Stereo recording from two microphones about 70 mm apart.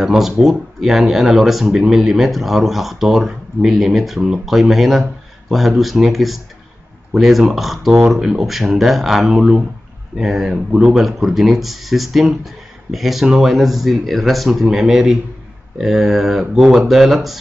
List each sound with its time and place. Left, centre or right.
0.0 s speech: centre